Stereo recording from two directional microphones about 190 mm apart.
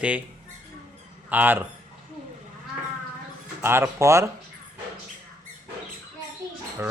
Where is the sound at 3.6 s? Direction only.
15° right (ahead or behind).